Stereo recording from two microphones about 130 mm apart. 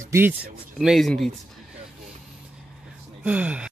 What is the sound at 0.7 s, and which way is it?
Speech, centre (ahead or behind).